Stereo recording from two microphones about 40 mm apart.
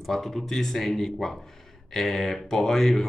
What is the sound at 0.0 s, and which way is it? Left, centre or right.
Speech, centre.